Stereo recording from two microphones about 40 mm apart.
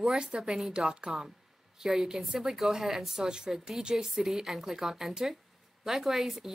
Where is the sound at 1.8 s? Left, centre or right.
Centre.